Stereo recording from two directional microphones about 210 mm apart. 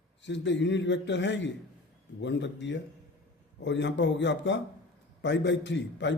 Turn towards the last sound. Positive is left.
turn(degrees=60)  # may be behind; listen again after turning